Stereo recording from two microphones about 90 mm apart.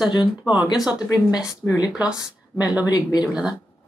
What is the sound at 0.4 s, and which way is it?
Speech, 10° right (ahead or behind).